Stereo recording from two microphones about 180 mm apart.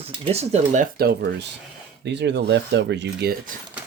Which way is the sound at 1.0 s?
70° right (ahead or behind).